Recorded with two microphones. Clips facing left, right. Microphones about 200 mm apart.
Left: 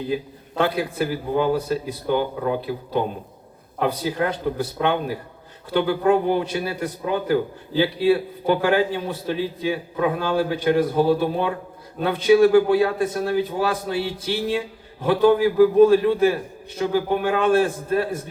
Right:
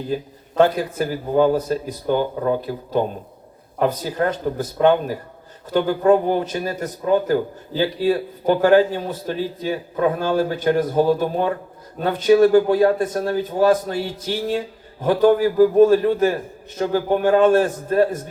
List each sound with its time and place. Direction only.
0.1 s a man's voice: 45° right (ahead or behind)